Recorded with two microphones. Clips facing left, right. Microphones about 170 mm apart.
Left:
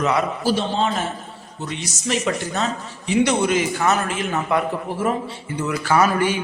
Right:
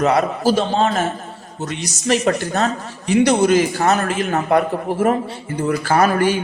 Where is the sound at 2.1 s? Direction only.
50° right (ahead or behind).